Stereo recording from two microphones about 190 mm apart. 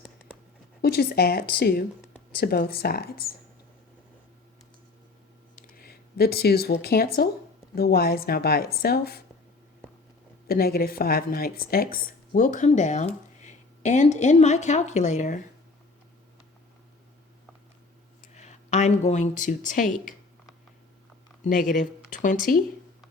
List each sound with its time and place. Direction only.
0.8 s speech: 55° left (ahead or behind)
5.7 s a sound: 55° left (ahead or behind)
6.8 s speech: 55° left (ahead or behind)
10.4 s speech: 55° left (ahead or behind)
18.3 s a woman's voice: 40° left (ahead or behind)
21.4 s speech: 45° left (ahead or behind)